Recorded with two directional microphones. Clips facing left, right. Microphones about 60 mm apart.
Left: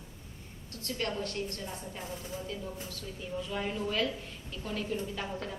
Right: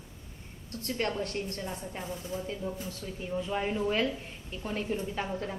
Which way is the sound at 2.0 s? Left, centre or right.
Centre.